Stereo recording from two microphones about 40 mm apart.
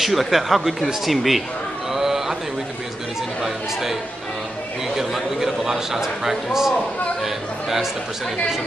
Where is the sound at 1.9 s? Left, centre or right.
Centre.